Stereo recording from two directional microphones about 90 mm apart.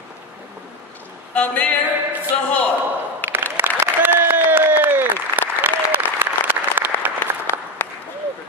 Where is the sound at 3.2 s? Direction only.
20° left (ahead or behind).